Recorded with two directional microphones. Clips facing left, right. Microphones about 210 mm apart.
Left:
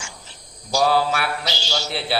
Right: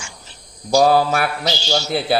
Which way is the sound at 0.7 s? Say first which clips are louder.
Right 5 dB; 45° right (ahead or behind).